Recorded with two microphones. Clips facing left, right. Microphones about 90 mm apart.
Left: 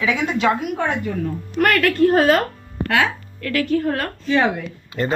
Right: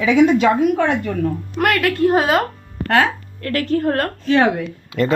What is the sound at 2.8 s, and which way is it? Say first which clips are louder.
A woman's voice: right 3 dB; 40° right (ahead or behind).